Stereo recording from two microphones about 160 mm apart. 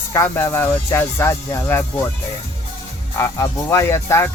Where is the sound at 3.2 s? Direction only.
20° left (ahead or behind).